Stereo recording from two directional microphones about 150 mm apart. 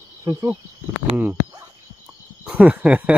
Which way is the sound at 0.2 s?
20° right (ahead or behind).